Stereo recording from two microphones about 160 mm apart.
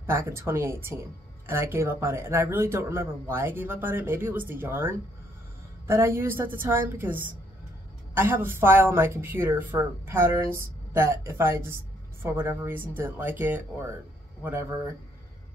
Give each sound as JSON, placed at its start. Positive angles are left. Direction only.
{"t": 0.0, "sound": "speech", "side_deg": -15}